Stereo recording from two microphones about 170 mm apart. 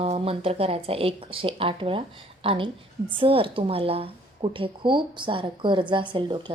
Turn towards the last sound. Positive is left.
turn(degrees=-30)  # may be behind; listen again after turning